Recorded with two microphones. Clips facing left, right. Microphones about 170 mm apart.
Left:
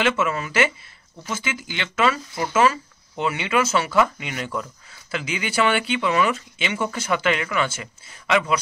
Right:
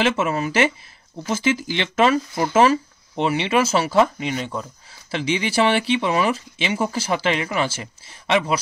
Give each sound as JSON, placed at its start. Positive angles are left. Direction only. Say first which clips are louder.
{"t": 0.0, "sound": "speech", "louder": "right 2 dB", "side_deg": -35}